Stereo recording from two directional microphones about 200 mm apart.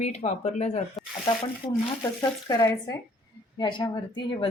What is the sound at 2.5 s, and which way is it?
A woman's voice, 20° left (ahead or behind).